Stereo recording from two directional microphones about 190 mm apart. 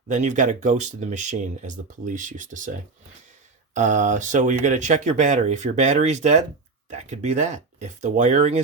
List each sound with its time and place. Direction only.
0.1 s speech: 40° right (ahead or behind)
3.8 s speech: 40° right (ahead or behind)